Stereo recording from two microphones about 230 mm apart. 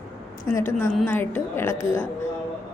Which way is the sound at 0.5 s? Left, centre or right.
Centre.